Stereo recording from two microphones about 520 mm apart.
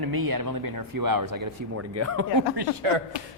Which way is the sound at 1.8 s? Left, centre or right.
Right.